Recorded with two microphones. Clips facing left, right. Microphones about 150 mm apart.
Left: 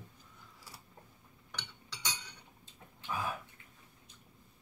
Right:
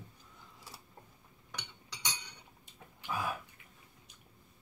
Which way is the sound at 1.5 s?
15° right (ahead or behind).